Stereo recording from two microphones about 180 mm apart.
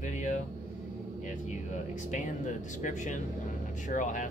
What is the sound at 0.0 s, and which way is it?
Air conditioning, 45° left (ahead or behind).